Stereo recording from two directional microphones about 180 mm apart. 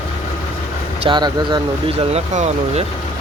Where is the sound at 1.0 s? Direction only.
25° right (ahead or behind).